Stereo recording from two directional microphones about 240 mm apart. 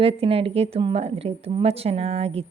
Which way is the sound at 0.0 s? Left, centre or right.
Right.